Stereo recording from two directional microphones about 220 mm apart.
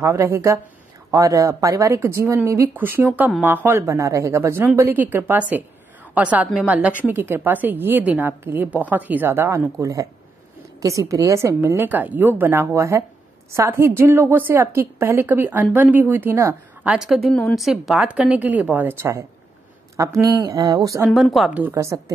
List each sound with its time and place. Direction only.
0.0 s a woman's voice: 10° right (ahead or behind)
21.0 s a woman's voice: centre (ahead or behind)